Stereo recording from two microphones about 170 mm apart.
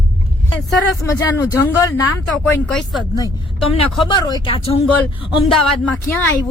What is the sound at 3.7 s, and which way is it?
Speech, 30° left (ahead or behind).